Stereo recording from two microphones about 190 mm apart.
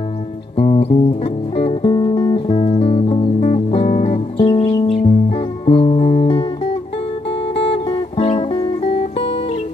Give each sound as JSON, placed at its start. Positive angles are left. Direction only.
{"t": 0.6, "sound": "music", "side_deg": 35}